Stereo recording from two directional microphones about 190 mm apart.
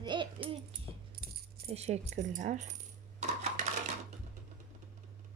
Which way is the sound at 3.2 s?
35° right (ahead or behind).